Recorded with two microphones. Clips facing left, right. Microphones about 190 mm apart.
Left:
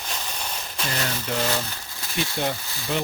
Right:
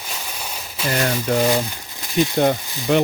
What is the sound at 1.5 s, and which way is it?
Speech, 15° right (ahead or behind).